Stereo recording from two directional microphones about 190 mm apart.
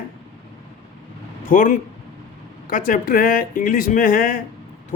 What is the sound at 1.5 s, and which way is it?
A man's voice, 45° left (ahead or behind).